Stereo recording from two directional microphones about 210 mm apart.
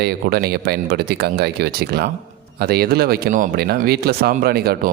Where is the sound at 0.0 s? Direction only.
50° right (ahead or behind).